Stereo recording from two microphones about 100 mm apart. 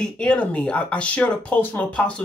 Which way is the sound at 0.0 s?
10° left (ahead or behind).